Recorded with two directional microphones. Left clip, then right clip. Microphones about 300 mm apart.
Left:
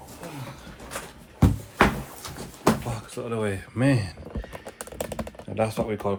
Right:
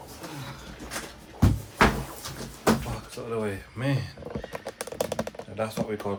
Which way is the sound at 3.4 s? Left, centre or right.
Left.